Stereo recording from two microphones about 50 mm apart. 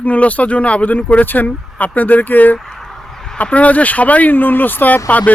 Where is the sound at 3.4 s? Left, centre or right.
Left.